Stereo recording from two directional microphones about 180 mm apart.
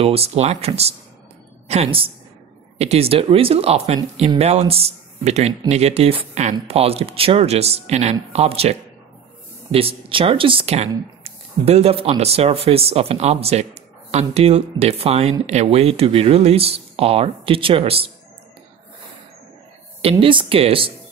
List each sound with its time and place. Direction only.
0.0 s speech: 35° right (ahead or behind)
20.0 s speech: 30° right (ahead or behind)